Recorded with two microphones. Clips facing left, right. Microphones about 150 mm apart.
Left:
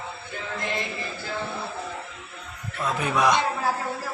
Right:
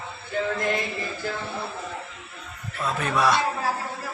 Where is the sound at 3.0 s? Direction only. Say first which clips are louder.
Left 1 dB; 15° left (ahead or behind).